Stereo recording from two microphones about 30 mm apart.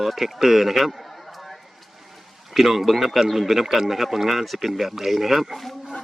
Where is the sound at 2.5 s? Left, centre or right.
Centre.